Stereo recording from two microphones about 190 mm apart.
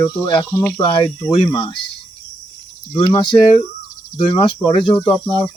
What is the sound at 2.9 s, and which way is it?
Speech, 20° left (ahead or behind).